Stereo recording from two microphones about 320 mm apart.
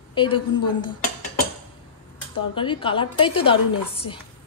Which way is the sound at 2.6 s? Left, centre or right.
Centre.